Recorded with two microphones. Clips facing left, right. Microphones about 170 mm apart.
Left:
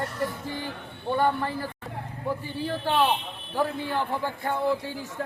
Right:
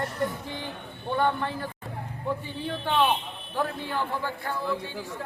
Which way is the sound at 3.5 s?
10° left (ahead or behind).